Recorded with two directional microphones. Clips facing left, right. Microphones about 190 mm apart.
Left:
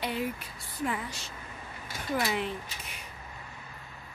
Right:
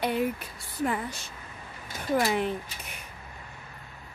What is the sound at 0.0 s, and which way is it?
Speech, 50° right (ahead or behind).